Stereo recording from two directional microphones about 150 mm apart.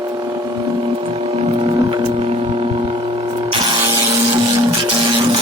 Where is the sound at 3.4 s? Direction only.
30° right (ahead or behind).